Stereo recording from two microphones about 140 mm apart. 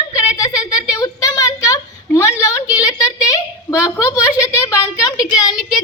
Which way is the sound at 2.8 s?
25° left (ahead or behind).